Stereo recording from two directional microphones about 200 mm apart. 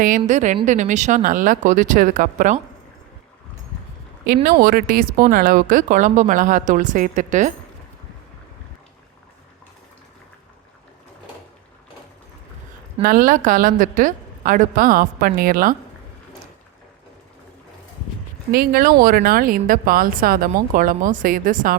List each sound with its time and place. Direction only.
0.3 s a woman's voice: 35° right (ahead or behind)
4.6 s a woman's voice: 45° right (ahead or behind)
13.0 s speech: 45° right (ahead or behind)
18.5 s speech: 50° right (ahead or behind)